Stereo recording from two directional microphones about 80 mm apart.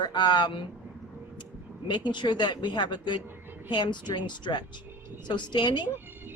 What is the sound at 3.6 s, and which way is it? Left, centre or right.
Speech, left.